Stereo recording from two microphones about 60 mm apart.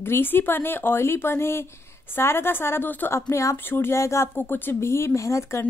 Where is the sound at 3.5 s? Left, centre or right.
Left.